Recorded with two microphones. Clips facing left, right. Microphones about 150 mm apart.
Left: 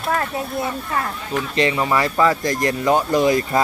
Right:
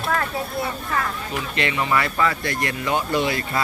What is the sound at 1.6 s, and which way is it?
Speech, 35° left (ahead or behind).